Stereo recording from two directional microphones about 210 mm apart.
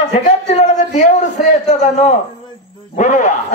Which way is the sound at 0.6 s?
35° left (ahead or behind).